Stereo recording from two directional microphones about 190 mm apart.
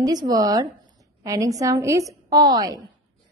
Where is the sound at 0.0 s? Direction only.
20° right (ahead or behind).